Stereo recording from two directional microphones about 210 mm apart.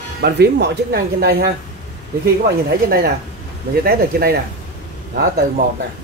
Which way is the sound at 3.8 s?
45° right (ahead or behind).